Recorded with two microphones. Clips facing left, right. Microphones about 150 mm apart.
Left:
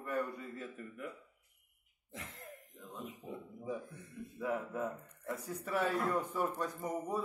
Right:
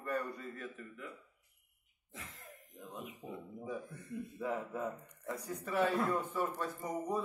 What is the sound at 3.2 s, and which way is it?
Speech, 20° right (ahead or behind).